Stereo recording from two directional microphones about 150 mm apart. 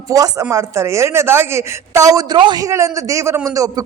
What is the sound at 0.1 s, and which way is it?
Speech, 20° right (ahead or behind).